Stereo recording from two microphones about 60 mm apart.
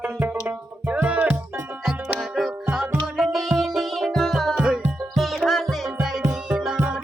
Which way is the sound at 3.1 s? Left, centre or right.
Centre.